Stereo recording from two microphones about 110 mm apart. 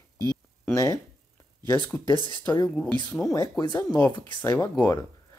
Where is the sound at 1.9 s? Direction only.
20° left (ahead or behind).